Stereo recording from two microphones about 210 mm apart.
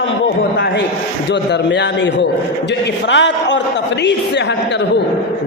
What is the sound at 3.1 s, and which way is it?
Speech, 60° left (ahead or behind).